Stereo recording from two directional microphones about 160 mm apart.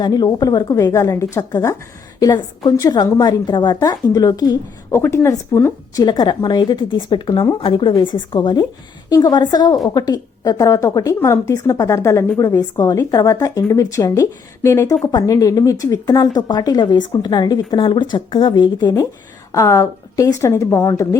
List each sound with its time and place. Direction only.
0.0 s speech: 25° left (ahead or behind)
6.1 s speech: 25° left (ahead or behind)